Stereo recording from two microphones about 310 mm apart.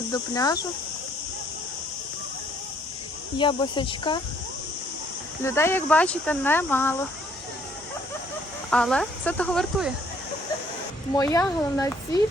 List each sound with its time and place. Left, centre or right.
0.1 s speech: centre
3.3 s speech: centre
5.4 s speech: centre
8.7 s speech: centre
11.2 s speech: centre